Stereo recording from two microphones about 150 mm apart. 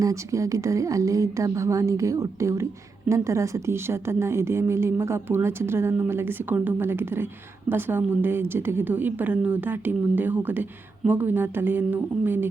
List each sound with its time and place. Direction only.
0.0 s a woman's voice: 20° right (ahead or behind)